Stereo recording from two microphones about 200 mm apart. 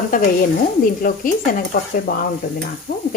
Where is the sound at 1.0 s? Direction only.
45° left (ahead or behind).